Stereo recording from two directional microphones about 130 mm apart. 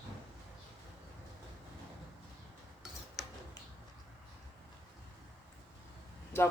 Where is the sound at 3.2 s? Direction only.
Centre (ahead or behind).